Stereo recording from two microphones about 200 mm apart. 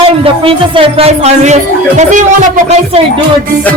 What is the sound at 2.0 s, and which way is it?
Music, 40° right (ahead or behind).